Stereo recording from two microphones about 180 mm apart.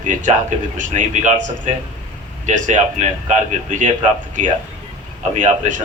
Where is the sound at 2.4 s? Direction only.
45° right (ahead or behind).